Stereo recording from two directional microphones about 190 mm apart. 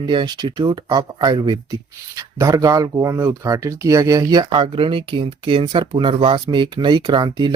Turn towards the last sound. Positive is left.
turn(degrees=-25)  # may be behind; listen again after turning